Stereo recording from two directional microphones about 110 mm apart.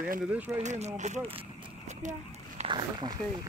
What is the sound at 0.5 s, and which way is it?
Speech, 85° right.